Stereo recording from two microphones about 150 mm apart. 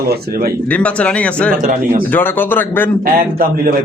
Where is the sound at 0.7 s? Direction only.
10° left (ahead or behind).